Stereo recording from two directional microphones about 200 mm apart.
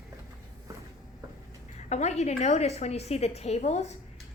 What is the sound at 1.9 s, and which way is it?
A woman's voice, 35° left (ahead or behind).